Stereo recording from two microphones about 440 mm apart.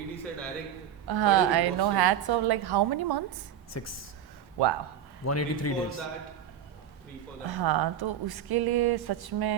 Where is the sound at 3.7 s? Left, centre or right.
Left.